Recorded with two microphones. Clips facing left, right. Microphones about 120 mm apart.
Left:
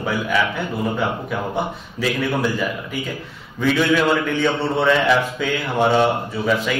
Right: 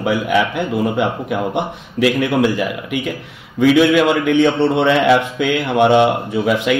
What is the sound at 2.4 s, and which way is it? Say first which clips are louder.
Speech: right 4 dB; 80° right.